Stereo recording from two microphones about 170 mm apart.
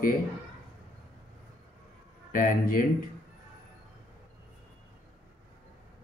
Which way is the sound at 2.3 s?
55° left (ahead or behind).